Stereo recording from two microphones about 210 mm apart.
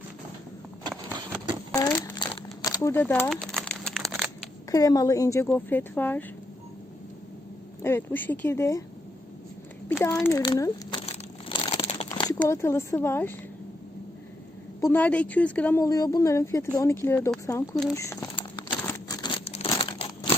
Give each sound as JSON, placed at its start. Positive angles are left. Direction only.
{"t": 0.9, "sound": "a sound", "side_deg": -20}
{"t": 1.7, "sound": "crumpling", "side_deg": 15}
{"t": 4.7, "sound": "speech", "side_deg": 15}
{"t": 7.8, "sound": "speech", "side_deg": 10}
{"t": 10.2, "sound": "crumpling", "side_deg": 15}
{"t": 12.2, "sound": "speech", "side_deg": 15}
{"t": 14.8, "sound": "speech", "side_deg": 10}
{"t": 17.9, "sound": "crumpling", "side_deg": 15}